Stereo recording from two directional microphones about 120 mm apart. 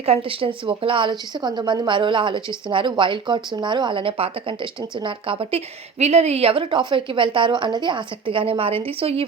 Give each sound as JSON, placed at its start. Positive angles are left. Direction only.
{"t": 0.0, "sound": "a woman's voice", "side_deg": -50}